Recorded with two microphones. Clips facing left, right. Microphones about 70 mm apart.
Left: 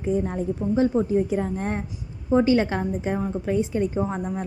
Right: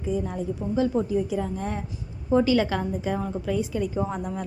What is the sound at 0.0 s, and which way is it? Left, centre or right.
A woman's voice, left.